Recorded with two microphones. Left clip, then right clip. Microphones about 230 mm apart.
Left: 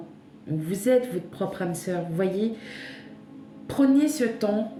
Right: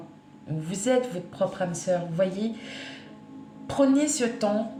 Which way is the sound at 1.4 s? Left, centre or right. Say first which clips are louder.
Right 5 dB; centre.